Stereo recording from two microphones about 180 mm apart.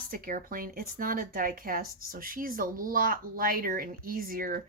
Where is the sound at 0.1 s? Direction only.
50° right (ahead or behind).